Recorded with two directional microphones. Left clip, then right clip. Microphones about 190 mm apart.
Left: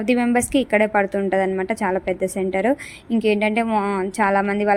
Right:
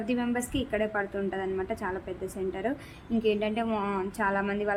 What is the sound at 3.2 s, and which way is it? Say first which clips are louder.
A woman's voice: left 9 dB; 35° left (ahead or behind).